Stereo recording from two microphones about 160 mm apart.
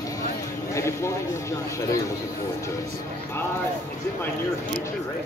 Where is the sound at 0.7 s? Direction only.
15° left (ahead or behind).